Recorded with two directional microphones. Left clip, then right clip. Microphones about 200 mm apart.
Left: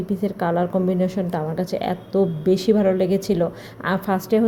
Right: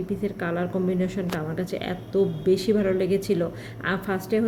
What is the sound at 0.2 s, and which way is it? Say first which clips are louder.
A woman's voice: left 9 dB; 15° left (ahead or behind).